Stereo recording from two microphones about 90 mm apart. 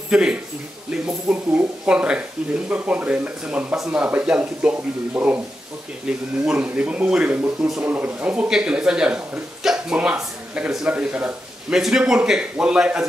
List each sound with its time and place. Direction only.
0.1 s a man's voice: 10° right (ahead or behind)
1.0 s a sound: 15° right (ahead or behind)
2.7 s speech: 15° right (ahead or behind)
3.7 s speech: 5° right (ahead or behind)
4.0 s a man's voice: 15° right (ahead or behind)